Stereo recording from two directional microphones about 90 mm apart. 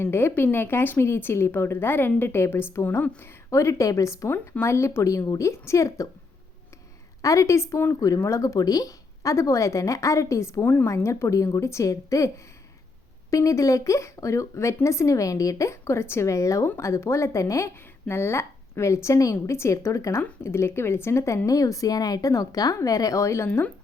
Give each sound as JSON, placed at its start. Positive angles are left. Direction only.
{"t": 0.0, "sound": "a woman's voice", "side_deg": 25}
{"t": 3.5, "sound": "a woman's voice", "side_deg": 30}
{"t": 7.2, "sound": "a woman's voice", "side_deg": 35}
{"t": 10.6, "sound": "a woman's voice", "side_deg": 20}
{"t": 10.8, "sound": "a woman's voice", "side_deg": 35}
{"t": 13.3, "sound": "a woman's voice", "side_deg": 40}
{"t": 23.5, "sound": "speech", "side_deg": 15}